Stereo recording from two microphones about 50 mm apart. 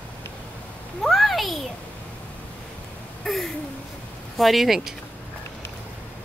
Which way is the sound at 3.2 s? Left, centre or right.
Centre.